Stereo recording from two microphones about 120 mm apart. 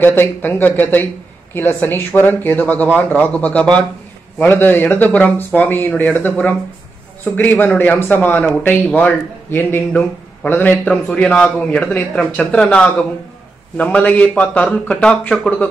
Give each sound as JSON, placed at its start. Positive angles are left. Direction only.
{"t": 0.0, "sound": "speech", "side_deg": 15}